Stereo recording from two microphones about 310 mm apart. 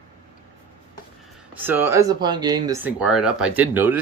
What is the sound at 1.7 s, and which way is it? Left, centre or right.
Speech, centre.